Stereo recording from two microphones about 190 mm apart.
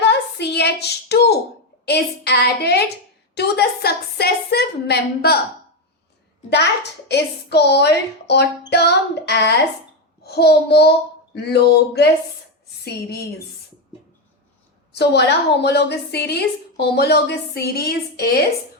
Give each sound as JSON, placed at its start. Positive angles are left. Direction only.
{"t": 0.0, "sound": "a sound", "side_deg": 60}
{"t": 1.8, "sound": "a woman's voice", "side_deg": 60}
{"t": 7.1, "sound": "a woman's voice", "side_deg": 60}
{"t": 14.9, "sound": "a woman's voice", "side_deg": 60}